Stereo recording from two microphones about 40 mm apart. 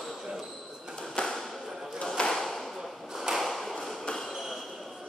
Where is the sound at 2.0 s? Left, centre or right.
Centre.